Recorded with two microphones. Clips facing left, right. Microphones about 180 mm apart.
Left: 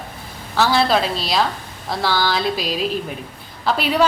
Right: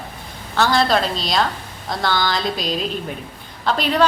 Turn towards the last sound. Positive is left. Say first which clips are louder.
# even
turn(degrees=5)  # may be behind; listen again after turning